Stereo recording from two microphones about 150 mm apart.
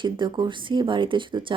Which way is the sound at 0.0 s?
30° right (ahead or behind).